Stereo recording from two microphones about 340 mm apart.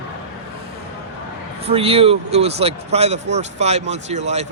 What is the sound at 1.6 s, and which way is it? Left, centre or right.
A man's voice, centre.